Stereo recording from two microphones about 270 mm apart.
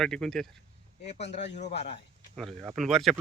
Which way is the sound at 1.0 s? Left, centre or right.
Left.